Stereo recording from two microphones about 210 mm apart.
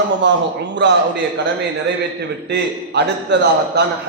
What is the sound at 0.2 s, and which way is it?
Speech, 60° right (ahead or behind).